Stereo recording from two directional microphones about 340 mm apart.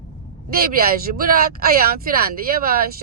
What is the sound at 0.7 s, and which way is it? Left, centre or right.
Speech, right.